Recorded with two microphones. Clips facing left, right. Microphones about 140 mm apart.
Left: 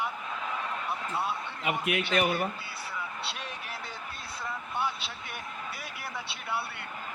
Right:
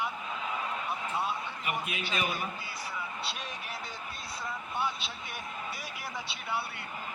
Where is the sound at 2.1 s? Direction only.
65° left (ahead or behind).